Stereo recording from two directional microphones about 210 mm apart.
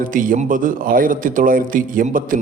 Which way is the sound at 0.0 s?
40° right (ahead or behind).